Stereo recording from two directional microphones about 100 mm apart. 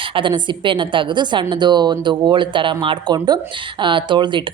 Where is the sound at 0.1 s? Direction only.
55° right (ahead or behind).